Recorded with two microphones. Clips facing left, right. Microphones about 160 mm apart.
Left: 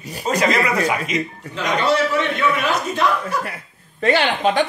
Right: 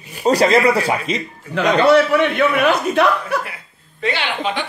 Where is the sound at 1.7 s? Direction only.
60° right (ahead or behind).